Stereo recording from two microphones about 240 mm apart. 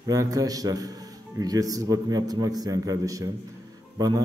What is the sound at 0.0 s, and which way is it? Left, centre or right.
A man's voice, centre.